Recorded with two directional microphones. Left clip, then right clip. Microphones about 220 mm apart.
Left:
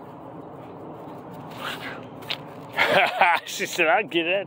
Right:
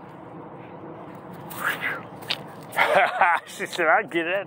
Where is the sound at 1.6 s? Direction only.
20° left (ahead or behind).